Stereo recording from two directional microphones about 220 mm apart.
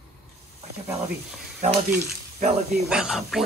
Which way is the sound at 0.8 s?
Centre (ahead or behind).